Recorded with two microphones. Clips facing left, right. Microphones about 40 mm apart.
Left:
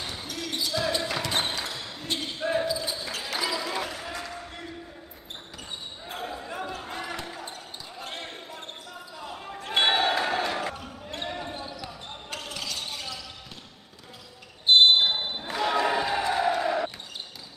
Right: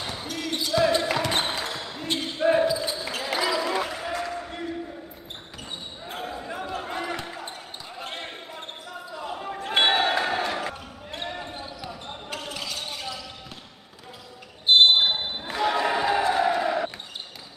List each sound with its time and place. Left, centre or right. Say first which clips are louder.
0.3 s basketball bounce: right 4 dB; right
2.8 s basketball bounce: right 3 dB; right
6.1 s basketball bounce: right 1 dB; centre
6.7 s basketball bounce: right 4 dB; right
15.0 s basketball bounce: right 1 dB; centre
15.5 s crowd: right 1 dB; centre